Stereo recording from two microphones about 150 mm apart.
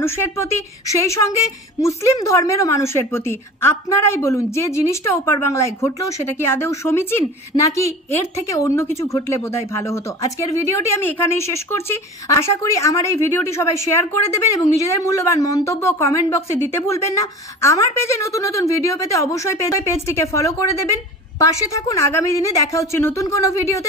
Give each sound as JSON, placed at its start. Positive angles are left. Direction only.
{"t": 0.0, "sound": "speech", "side_deg": 15}